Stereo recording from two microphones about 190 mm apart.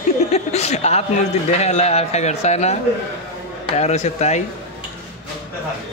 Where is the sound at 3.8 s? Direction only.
35° left (ahead or behind).